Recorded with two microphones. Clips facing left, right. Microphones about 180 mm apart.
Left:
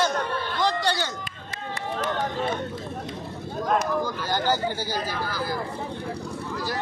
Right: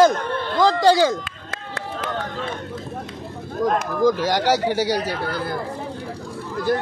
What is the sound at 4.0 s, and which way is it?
Speech, 90° right.